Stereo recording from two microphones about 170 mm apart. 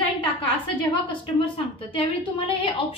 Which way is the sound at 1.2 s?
30° left (ahead or behind).